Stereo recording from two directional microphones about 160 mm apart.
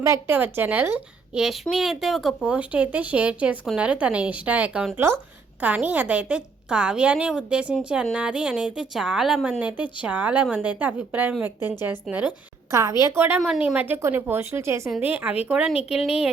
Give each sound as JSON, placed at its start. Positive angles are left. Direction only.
{"t": 0.0, "sound": "a woman's voice", "side_deg": -15}
{"t": 13.4, "sound": "a woman's voice", "side_deg": 0}
{"t": 14.8, "sound": "a woman's voice", "side_deg": -5}